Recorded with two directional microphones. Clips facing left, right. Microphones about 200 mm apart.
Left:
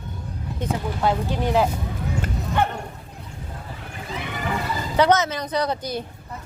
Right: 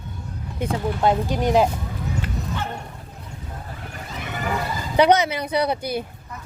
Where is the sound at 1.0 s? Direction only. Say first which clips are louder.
Right 2 dB; 15° right (ahead or behind).